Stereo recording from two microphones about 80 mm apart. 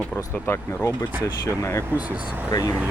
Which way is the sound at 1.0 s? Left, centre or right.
Left.